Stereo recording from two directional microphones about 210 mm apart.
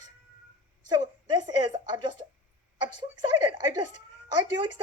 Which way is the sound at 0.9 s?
20° right (ahead or behind).